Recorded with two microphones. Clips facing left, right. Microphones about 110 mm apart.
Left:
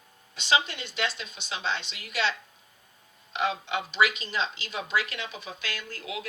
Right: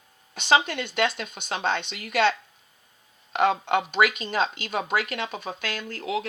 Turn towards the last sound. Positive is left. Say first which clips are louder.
# right 7 dB
turn(degrees=-45)  # may be behind; listen again after turning